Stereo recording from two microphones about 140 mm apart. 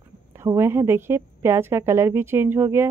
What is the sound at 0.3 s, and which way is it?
A woman's voice, 20° right (ahead or behind).